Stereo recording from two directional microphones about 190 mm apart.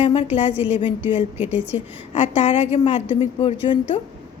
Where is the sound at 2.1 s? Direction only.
35° left (ahead or behind).